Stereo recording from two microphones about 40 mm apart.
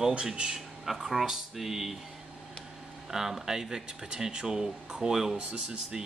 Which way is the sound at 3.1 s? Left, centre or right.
Centre.